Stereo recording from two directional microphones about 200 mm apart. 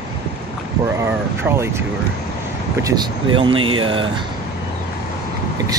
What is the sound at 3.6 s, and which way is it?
Speech, 90° right.